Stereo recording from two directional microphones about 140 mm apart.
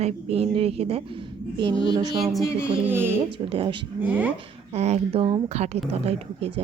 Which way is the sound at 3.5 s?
40° right (ahead or behind).